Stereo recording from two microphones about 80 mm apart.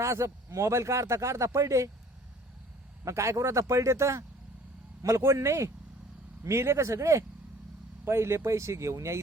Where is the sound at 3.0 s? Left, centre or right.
Right.